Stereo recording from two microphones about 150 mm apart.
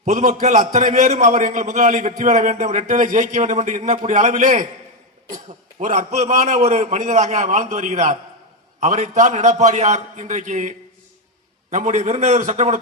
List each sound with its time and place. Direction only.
0.0 s a man's voice: 60° right (ahead or behind)
5.8 s a man's voice: 55° right (ahead or behind)